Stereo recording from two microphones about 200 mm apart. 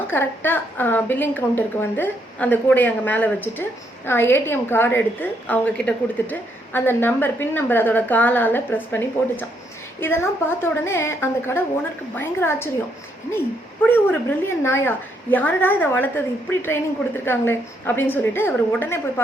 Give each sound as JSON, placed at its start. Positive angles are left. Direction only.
{"t": 0.1, "sound": "a woman's voice", "side_deg": 10}
{"t": 13.8, "sound": "a woman's voice", "side_deg": 10}